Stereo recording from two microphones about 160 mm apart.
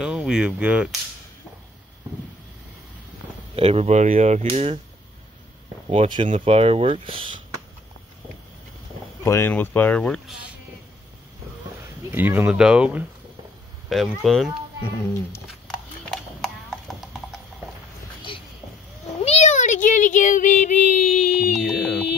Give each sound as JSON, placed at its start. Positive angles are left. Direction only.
{"t": 0.0, "sound": "speech", "side_deg": -5}
{"t": 3.5, "sound": "speech", "side_deg": -40}
{"t": 5.9, "sound": "speech", "side_deg": -35}
{"t": 9.2, "sound": "speech", "side_deg": 15}
{"t": 12.1, "sound": "speech", "side_deg": -15}
{"t": 16.1, "sound": "clip-clop", "side_deg": 0}
{"t": 18.3, "sound": "a sound", "side_deg": 30}
{"t": 19.2, "sound": "child singing", "side_deg": 45}
{"t": 21.5, "sound": "a sound", "side_deg": 0}